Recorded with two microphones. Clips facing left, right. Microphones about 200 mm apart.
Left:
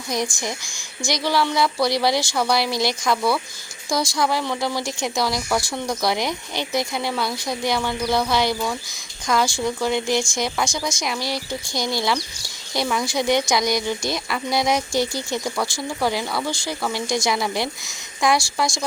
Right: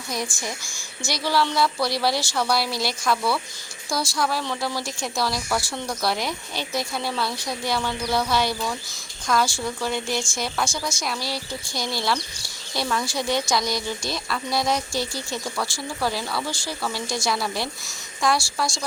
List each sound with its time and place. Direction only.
0.1 s speech: 15° left (ahead or behind)